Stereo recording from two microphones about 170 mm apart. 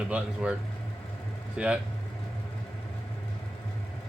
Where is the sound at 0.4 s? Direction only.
5° right (ahead or behind).